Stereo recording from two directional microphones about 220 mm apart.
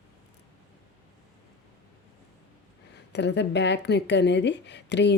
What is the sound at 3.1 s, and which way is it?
A woman's voice, 50° left (ahead or behind).